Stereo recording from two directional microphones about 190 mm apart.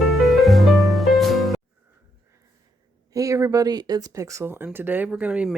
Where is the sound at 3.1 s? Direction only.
15° right (ahead or behind).